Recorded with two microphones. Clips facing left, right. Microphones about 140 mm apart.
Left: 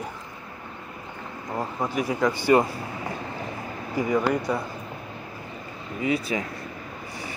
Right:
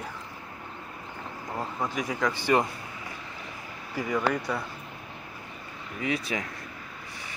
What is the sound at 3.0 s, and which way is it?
Train, 50° left (ahead or behind).